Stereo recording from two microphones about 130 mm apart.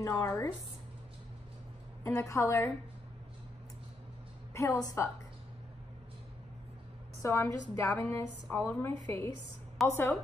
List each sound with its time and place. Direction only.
0.0 s a woman's voice: 25° left (ahead or behind)
2.0 s a woman's voice: 25° left (ahead or behind)
4.6 s a woman's voice: 20° left (ahead or behind)
7.2 s a woman's voice: 20° left (ahead or behind)